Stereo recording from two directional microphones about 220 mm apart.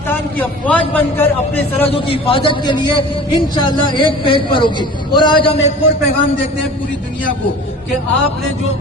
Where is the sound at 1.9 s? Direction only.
25° left (ahead or behind).